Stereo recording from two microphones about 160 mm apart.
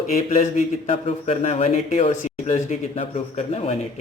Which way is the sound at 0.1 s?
55° left (ahead or behind).